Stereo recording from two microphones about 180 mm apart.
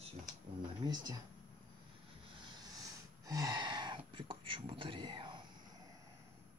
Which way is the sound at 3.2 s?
20° right (ahead or behind).